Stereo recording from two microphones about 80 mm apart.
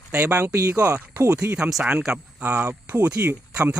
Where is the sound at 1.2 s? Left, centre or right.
Centre.